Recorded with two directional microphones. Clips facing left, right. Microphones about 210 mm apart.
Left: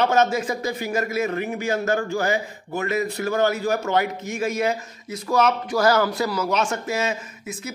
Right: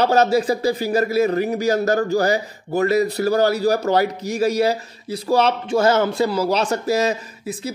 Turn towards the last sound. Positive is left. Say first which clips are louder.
# right 5 dB
turn(degrees=-35)  # may be behind; listen again after turning